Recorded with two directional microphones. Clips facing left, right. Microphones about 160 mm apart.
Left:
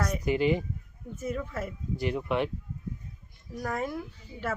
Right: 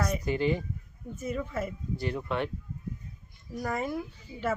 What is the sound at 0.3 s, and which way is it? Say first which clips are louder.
Speech: left 4 dB; 15° left (ahead or behind).